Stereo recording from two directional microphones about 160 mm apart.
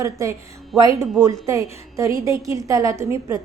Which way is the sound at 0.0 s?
20° right (ahead or behind).